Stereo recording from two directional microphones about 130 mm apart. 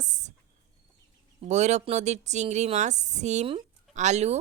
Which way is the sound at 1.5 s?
60° right (ahead or behind).